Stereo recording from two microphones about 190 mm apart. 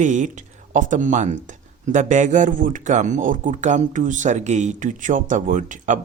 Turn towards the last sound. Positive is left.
turn(degrees=-40)  # may be behind; listen again after turning